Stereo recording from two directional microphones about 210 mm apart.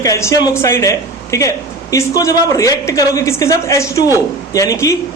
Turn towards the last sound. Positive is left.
turn(degrees=15)  # may be behind; listen again after turning